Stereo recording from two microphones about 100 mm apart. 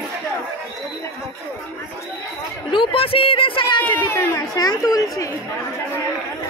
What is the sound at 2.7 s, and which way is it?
Speech, 60° left (ahead or behind).